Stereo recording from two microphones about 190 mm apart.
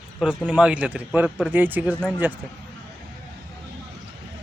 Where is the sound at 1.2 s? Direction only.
5° left (ahead or behind).